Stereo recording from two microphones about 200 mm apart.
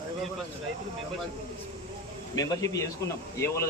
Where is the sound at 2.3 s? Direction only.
15° left (ahead or behind).